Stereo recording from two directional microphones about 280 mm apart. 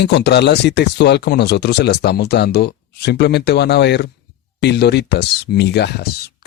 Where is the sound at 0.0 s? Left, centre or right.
Left.